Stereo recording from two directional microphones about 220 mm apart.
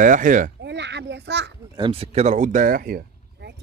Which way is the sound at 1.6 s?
20° right (ahead or behind).